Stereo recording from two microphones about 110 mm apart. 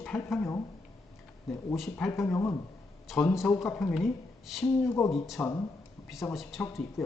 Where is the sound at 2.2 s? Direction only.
25° left (ahead or behind).